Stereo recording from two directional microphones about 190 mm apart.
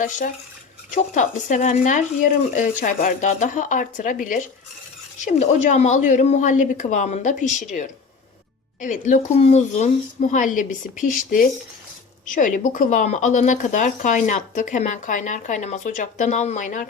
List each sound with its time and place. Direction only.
0.9 s speech: 40° left (ahead or behind)